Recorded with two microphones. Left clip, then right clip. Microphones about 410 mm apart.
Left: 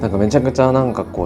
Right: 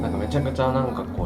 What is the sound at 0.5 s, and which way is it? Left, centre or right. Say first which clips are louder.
Speech: left 8 dB; left.